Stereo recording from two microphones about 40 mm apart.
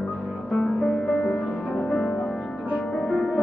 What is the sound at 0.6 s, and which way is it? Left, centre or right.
Music, centre.